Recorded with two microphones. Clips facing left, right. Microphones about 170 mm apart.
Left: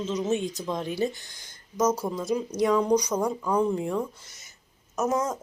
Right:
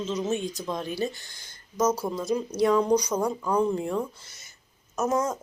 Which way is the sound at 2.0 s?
5° right (ahead or behind).